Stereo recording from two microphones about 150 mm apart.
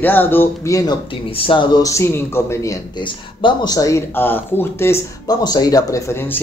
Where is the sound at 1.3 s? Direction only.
35° left (ahead or behind).